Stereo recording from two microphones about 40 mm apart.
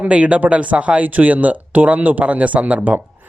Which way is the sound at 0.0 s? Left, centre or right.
Right.